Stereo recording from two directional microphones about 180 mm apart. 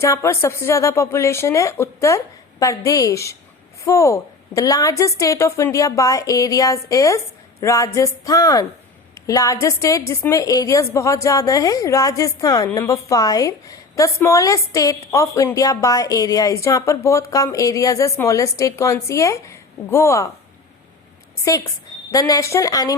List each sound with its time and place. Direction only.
0.0 s a woman's voice: 15° left (ahead or behind)
21.4 s a woman's voice: 20° left (ahead or behind)